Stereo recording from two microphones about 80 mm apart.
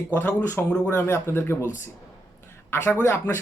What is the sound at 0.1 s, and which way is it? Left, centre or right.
Speech, left.